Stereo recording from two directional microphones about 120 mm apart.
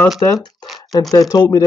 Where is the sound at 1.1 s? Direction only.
30° left (ahead or behind).